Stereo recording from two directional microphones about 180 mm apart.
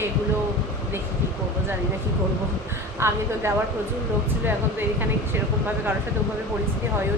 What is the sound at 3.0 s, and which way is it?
Speech, 15° right (ahead or behind).